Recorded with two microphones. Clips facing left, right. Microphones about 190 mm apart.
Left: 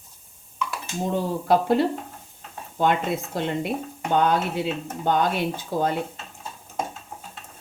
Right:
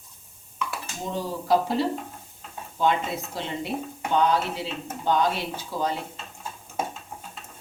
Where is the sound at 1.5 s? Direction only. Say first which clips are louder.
Left 3 dB; 55° left (ahead or behind).